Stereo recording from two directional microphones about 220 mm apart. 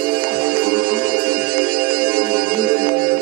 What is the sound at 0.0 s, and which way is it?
Music, 45° right (ahead or behind).